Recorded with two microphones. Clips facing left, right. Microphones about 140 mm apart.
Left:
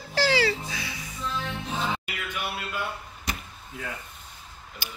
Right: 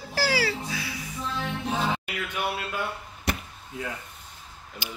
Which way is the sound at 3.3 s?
65° right (ahead or behind).